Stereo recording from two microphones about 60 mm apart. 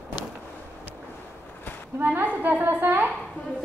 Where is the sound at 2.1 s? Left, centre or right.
Right.